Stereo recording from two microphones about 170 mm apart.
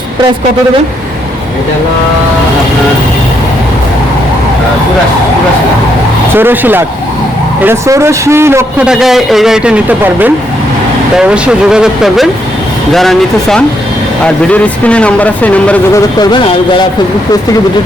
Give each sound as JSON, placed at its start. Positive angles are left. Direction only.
{"t": 6.3, "sound": "a man's voice", "side_deg": -10}
{"t": 8.9, "sound": "speech", "side_deg": 0}
{"t": 16.1, "sound": "speech", "side_deg": 25}